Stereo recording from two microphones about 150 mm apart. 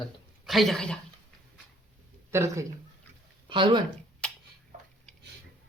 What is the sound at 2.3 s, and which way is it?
Speech, 15° right (ahead or behind).